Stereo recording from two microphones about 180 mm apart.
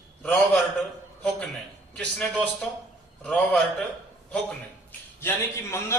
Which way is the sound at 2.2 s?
5° left (ahead or behind).